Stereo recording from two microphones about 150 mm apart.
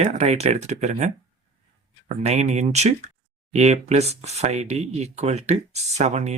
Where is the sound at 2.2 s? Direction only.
45° right (ahead or behind).